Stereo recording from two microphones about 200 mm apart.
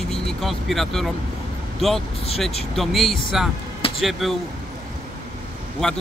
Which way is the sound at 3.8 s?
25° left (ahead or behind).